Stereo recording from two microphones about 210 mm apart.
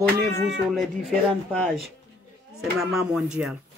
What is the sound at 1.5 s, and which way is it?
Speech, centre (ahead or behind).